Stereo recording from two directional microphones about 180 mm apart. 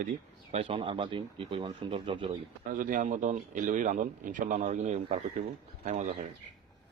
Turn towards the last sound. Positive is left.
turn(degrees=-40)  # may be behind; listen again after turning